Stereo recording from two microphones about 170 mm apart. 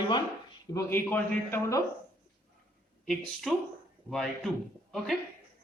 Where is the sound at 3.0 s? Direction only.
Centre (ahead or behind).